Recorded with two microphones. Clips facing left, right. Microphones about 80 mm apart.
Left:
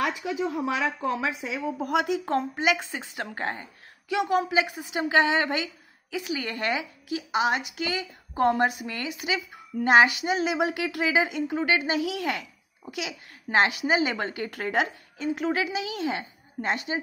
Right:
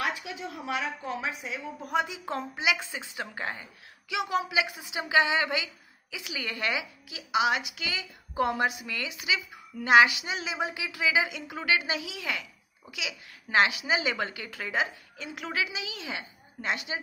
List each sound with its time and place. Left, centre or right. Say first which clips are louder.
1.4 s a woman's voice: left 7 dB; left
11.5 s a woman's voice: left 3 dB; left
15.1 s a woman's voice: left 7 dB; left